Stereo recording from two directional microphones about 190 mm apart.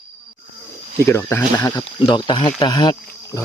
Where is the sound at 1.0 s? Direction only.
15° left (ahead or behind).